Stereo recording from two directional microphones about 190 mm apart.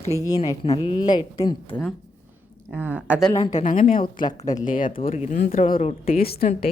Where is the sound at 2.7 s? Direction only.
10° right (ahead or behind).